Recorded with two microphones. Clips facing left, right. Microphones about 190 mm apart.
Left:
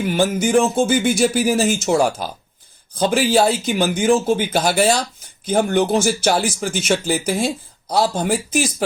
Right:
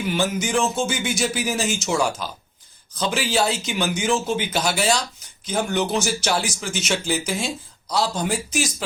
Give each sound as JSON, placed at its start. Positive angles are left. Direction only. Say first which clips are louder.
{"t": 0.0, "sound": "speech", "louder": "left 5 dB", "side_deg": 50}